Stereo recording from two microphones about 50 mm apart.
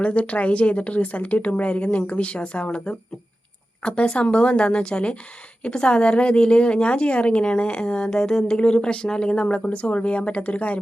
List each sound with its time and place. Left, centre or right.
0.0 s a woman's voice: left
3.8 s a woman's voice: left